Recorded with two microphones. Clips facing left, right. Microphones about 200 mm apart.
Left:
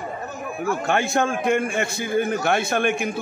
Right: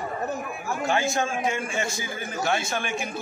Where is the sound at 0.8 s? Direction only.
60° left (ahead or behind).